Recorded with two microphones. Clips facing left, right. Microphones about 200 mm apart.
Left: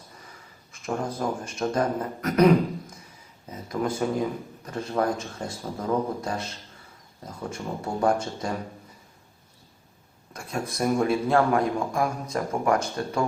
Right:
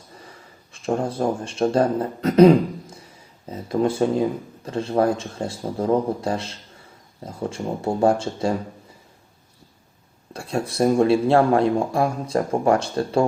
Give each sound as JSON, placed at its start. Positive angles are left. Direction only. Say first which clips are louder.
{"t": 0.7, "sound": "speech", "louder": "right 6 dB", "side_deg": -30}
{"t": 10.3, "sound": "speech", "louder": "right 7 dB", "side_deg": -30}